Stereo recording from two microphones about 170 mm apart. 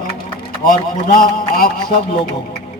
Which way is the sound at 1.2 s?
55° left (ahead or behind).